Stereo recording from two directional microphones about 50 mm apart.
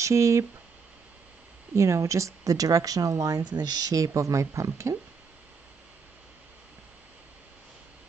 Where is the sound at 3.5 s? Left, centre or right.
Right.